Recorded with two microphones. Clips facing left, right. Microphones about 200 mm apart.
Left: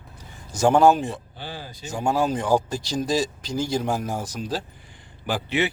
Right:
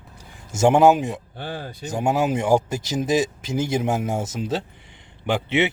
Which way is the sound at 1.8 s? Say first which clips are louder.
Right 2 dB; 20° right (ahead or behind).